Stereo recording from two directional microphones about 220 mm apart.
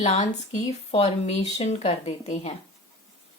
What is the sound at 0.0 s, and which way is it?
Speech, 30° left (ahead or behind).